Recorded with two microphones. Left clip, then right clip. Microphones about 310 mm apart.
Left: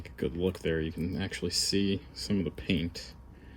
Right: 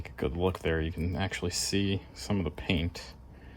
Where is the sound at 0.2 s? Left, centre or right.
Centre.